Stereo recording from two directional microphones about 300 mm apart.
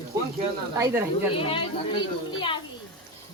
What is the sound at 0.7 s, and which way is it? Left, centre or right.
Speech, centre.